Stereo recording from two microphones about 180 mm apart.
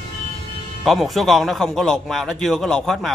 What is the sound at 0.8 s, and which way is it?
A man's voice, centre (ahead or behind).